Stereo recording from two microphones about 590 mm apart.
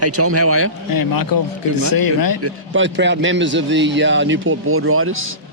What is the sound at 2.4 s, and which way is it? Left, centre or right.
A man's voice, right.